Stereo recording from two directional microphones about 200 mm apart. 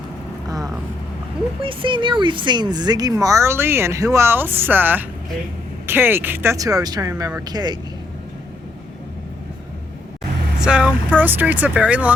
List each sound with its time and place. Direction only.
0.4 s vehicle: 20° right (ahead or behind)
1.6 s speech: 25° right (ahead or behind)
10.6 s speech: 5° right (ahead or behind)